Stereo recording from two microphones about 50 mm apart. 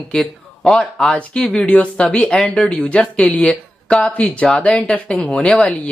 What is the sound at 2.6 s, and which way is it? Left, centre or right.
Speech, left.